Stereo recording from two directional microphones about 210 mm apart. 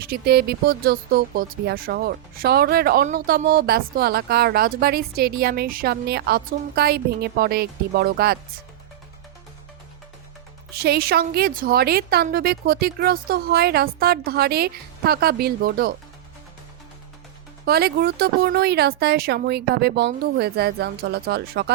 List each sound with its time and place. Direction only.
0.0 s speech: 50° right (ahead or behind)
10.8 s speech: 50° right (ahead or behind)
17.7 s speech: 50° right (ahead or behind)